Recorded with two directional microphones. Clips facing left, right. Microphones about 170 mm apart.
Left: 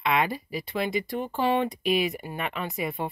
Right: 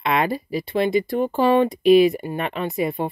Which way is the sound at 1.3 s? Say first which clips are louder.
Right 7 dB; 45° right (ahead or behind).